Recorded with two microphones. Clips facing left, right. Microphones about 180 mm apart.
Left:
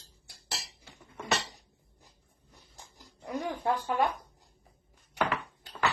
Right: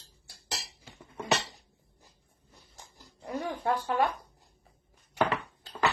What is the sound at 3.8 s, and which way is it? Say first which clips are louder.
Speech: right 1 dB; 15° left (ahead or behind).